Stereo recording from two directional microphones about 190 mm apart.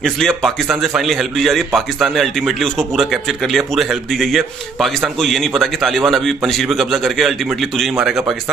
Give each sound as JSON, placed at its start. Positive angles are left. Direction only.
{"t": 0.0, "sound": "a man's voice", "side_deg": 0}